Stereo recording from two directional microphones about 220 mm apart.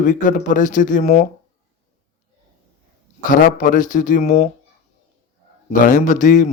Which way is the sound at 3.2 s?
40° left (ahead or behind).